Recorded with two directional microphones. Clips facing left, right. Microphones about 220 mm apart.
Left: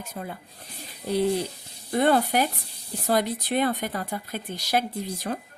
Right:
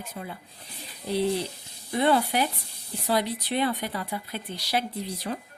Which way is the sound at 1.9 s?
45° left (ahead or behind).